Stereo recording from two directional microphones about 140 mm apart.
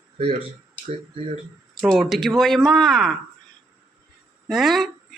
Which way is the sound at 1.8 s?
Centre (ahead or behind).